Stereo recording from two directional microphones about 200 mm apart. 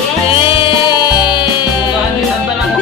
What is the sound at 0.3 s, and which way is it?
Music, 25° left (ahead or behind).